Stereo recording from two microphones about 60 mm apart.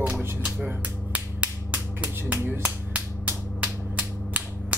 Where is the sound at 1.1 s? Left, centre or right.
Right.